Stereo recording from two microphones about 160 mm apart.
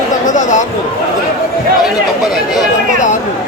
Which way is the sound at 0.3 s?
50° left (ahead or behind).